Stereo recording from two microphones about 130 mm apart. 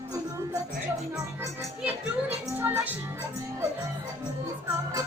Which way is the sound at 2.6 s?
15° right (ahead or behind).